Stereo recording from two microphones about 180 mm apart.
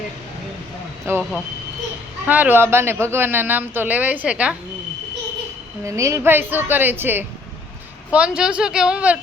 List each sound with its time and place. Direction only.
1.0 s speech: 10° right (ahead or behind)
5.8 s speech: 15° right (ahead or behind)